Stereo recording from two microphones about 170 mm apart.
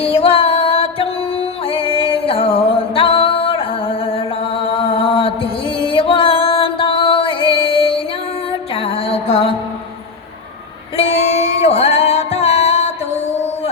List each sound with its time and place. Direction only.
0.0 s music: 35° left (ahead or behind)
10.9 s music: 35° left (ahead or behind)